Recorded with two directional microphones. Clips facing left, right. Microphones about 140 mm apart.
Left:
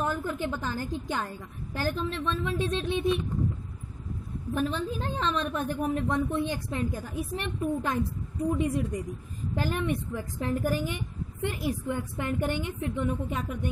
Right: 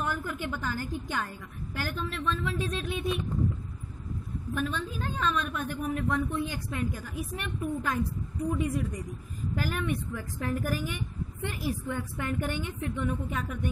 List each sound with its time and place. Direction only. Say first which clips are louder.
0.0 s a woman's voice: left 3 dB; 25° left (ahead or behind)
4.6 s a woman's voice: left 4 dB; 30° left (ahead or behind)